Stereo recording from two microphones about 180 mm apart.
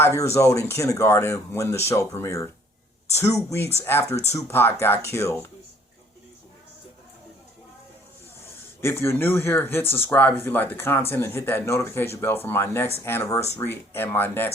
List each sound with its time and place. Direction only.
0.0 s speech: 15° left (ahead or behind)
3.2 s speech: 35° left (ahead or behind)
3.8 s speech: 15° left (ahead or behind)
8.8 s speech: 15° left (ahead or behind)